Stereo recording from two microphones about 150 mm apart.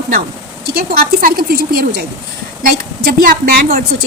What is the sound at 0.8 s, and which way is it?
A woman's voice, 85° right.